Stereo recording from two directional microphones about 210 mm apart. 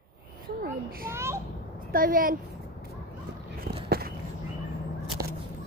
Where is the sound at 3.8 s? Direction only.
45° right (ahead or behind).